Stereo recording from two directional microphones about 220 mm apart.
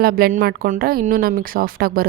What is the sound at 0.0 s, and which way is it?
Speech, 40° right (ahead or behind).